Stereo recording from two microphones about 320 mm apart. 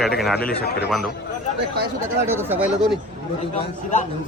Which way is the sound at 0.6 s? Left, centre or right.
Left.